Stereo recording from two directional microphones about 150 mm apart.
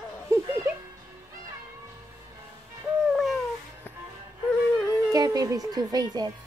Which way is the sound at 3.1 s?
Centre (ahead or behind).